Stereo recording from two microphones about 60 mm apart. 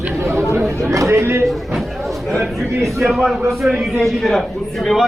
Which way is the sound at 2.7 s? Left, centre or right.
Right.